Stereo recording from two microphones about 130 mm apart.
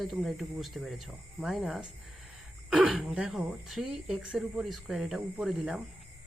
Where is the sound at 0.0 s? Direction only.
Centre (ahead or behind).